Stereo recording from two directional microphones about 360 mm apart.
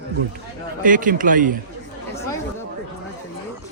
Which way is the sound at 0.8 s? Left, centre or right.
Right.